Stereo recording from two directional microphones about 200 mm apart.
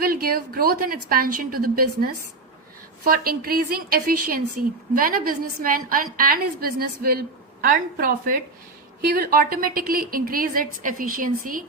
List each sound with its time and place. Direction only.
0.0 s a woman's voice: 50° right (ahead or behind)